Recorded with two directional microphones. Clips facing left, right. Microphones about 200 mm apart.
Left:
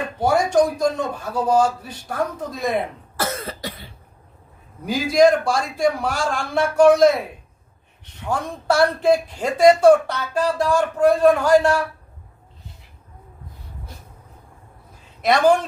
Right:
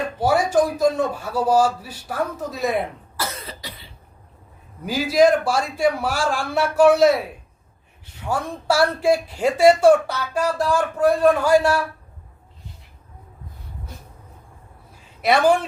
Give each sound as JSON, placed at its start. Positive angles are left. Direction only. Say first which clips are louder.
{"t": 0.2, "sound": "speech", "louder": "left 1 dB", "side_deg": -5}
{"t": 3.2, "sound": "cough", "louder": "left 5 dB", "side_deg": 50}
{"t": 4.9, "sound": "a man's voice", "louder": "left 1 dB", "side_deg": -5}
{"t": 8.2, "sound": "speech", "louder": "even", "side_deg": -10}
{"t": 15.2, "sound": "speech", "louder": "left 1 dB", "side_deg": -5}